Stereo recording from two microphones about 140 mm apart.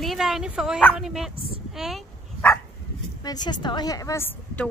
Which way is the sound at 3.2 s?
30° left (ahead or behind).